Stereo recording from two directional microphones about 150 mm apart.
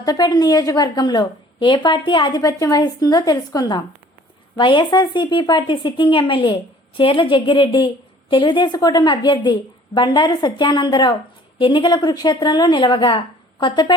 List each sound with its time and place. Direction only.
0.0 s a woman's voice: 25° left (ahead or behind)